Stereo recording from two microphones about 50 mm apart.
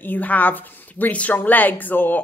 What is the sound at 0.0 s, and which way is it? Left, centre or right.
Speech, left.